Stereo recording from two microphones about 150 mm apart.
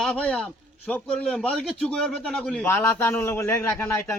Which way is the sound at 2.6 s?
15° left (ahead or behind).